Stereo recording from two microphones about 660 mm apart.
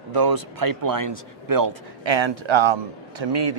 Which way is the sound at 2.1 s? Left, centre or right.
Right.